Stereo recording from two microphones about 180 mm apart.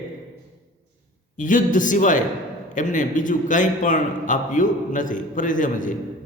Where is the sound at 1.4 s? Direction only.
45° left (ahead or behind).